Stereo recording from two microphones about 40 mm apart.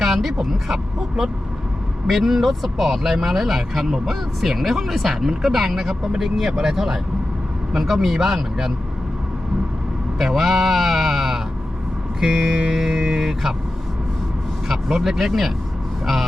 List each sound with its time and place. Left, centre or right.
0.0 s speech: centre
10.2 s speech: centre
12.5 s music: right
12.8 s speech: centre
14.7 s speech: centre